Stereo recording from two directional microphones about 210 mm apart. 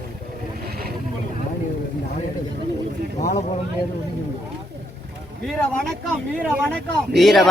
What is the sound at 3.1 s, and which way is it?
Speech, 35° left (ahead or behind).